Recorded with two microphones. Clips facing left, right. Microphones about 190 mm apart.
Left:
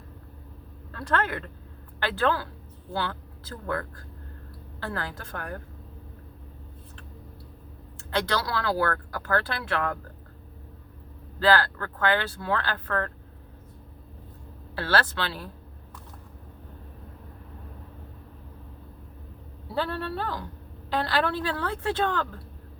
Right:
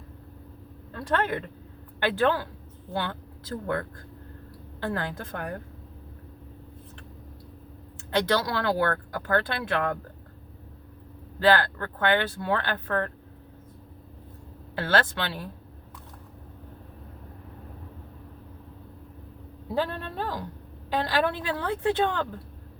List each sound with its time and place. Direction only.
0.9 s speech: 20° right (ahead or behind)
4.8 s speech: 20° right (ahead or behind)
8.1 s speech: 20° right (ahead or behind)
11.3 s speech: 20° right (ahead or behind)
14.8 s speech: 20° right (ahead or behind)
19.7 s speech: 15° right (ahead or behind)